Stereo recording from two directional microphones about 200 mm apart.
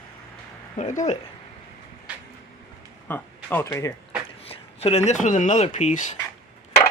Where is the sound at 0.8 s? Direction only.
35° left (ahead or behind).